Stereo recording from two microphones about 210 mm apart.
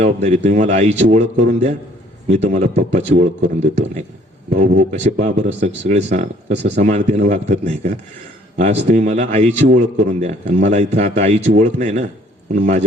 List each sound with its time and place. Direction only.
0.0 s speech: 35° right (ahead or behind)